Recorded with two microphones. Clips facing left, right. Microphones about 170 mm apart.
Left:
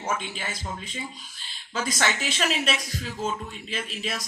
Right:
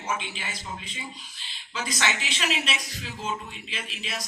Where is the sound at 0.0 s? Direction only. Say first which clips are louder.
Left 2 dB; 45° left (ahead or behind).